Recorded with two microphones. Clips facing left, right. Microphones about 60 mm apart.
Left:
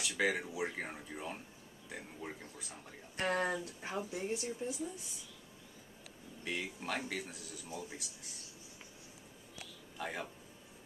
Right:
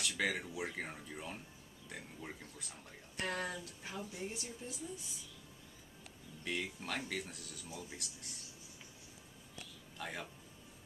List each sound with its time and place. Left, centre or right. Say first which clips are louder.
0.2 s speech: left 4 dB; centre
3.2 s speech: left 6 dB; left
6.4 s speech: left 1 dB; centre
9.9 s speech: left 3 dB; centre